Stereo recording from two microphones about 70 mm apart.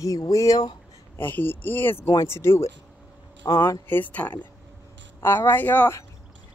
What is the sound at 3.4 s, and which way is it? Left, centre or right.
Speech, left.